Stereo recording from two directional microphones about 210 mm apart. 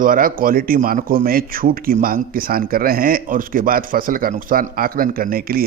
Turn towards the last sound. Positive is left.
turn(degrees=-45)  # may be behind; listen again after turning